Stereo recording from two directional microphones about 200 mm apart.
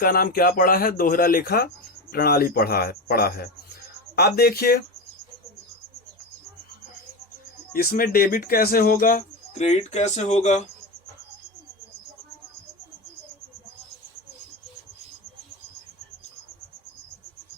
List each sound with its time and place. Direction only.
0.0 s speech: 45° left (ahead or behind)
7.7 s speech: 45° left (ahead or behind)